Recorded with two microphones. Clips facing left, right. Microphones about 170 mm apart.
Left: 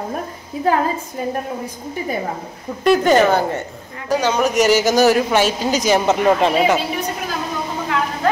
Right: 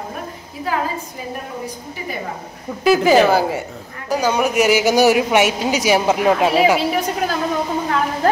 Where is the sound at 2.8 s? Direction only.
5° right (ahead or behind).